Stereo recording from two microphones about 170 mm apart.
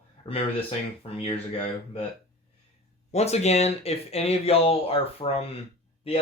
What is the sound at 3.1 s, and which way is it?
Speech, 40° left (ahead or behind).